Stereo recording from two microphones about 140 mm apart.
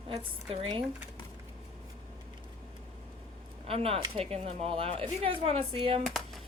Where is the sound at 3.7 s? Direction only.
45° right (ahead or behind).